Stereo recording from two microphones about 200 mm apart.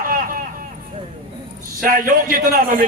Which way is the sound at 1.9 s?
45° right (ahead or behind).